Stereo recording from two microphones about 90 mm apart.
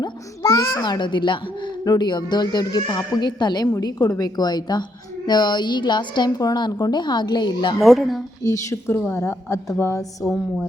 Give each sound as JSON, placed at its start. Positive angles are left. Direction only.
{"t": 0.0, "sound": "a child's voice", "side_deg": 45}
{"t": 1.8, "sound": "a woman's voice", "side_deg": 50}
{"t": 3.8, "sound": "a woman's voice", "side_deg": 45}
{"t": 7.8, "sound": "speech", "side_deg": 0}
{"t": 8.4, "sound": "a woman's voice", "side_deg": 35}